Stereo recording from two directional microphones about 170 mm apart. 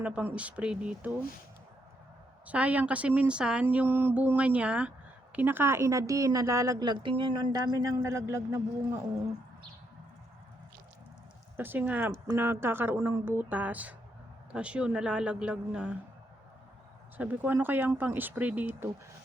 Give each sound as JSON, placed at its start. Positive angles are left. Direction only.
{"t": 0.0, "sound": "speech", "side_deg": -10}
{"t": 2.5, "sound": "a woman's voice", "side_deg": -10}
{"t": 11.5, "sound": "speech", "side_deg": -10}
{"t": 17.2, "sound": "speech", "side_deg": -10}